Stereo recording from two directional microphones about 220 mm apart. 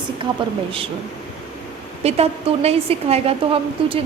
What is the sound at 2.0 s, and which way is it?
A woman's voice, 30° right (ahead or behind).